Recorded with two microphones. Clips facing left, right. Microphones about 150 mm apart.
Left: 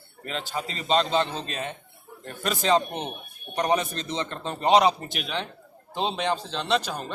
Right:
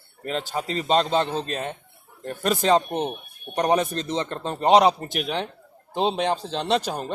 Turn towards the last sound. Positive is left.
turn(degrees=-45)  # may be behind; listen again after turning